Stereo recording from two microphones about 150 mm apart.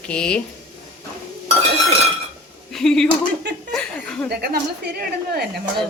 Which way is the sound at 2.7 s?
5° left (ahead or behind).